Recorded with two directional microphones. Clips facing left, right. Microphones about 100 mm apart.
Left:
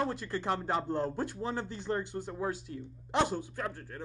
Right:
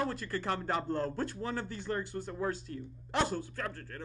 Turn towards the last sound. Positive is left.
turn(degrees=15)  # may be behind; listen again after turning